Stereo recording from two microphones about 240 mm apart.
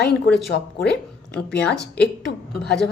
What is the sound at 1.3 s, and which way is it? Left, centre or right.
Speech, centre.